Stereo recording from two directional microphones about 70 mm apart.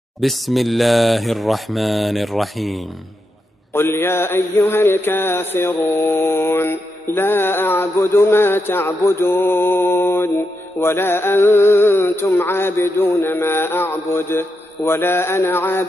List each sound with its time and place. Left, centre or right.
0.2 s mantra: centre
3.7 s mantra: left